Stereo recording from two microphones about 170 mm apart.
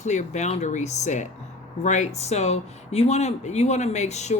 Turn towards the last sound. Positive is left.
turn(degrees=40)  # may be behind; listen again after turning